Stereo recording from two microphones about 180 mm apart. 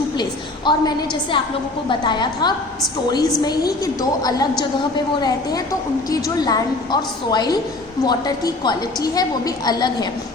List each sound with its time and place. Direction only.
0.2 s a sound: 25° left (ahead or behind)
1.9 s a woman's voice: 25° left (ahead or behind)
6.1 s a woman's voice: 20° left (ahead or behind)
8.6 s a woman's voice: 20° left (ahead or behind)